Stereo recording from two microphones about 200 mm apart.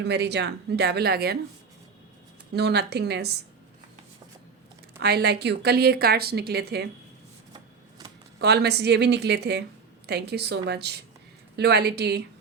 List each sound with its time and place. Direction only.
0.0 s a woman's voice: 60° right (ahead or behind)
2.5 s a woman's voice: 55° right (ahead or behind)
4.9 s a woman's voice: 55° right (ahead or behind)
7.5 s shuffling cards: 20° right (ahead or behind)
8.4 s a woman's voice: 55° right (ahead or behind)